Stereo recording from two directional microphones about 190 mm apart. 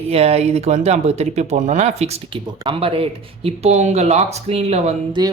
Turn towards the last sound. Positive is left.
turn(degrees=-20)  # may be behind; listen again after turning